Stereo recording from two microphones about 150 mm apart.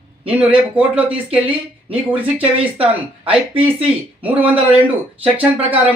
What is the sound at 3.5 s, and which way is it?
Speech, 40° right (ahead or behind).